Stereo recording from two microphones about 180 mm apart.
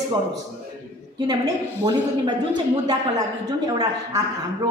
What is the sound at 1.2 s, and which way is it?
A woman's voice, 20° right (ahead or behind).